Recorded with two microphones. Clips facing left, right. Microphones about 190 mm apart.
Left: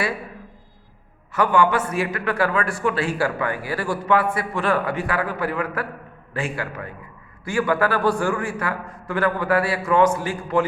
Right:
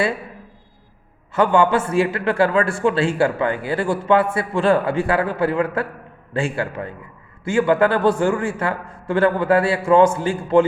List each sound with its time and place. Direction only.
1.3 s a man's voice: 25° right (ahead or behind)